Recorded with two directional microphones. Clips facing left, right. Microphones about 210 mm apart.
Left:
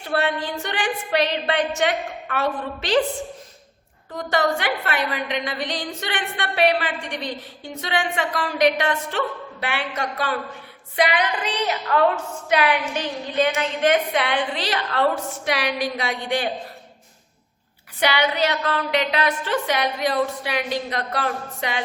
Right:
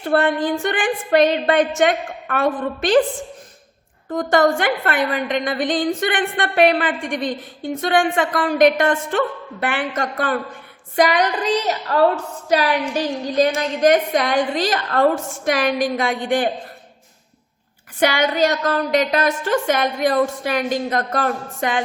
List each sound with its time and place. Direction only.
0.0 s a woman's voice: 50° right (ahead or behind)
4.1 s a woman's voice: 50° right (ahead or behind)
10.9 s a sound: 45° right (ahead or behind)
13.6 s a woman's voice: 40° right (ahead or behind)
18.0 s a woman's voice: 45° right (ahead or behind)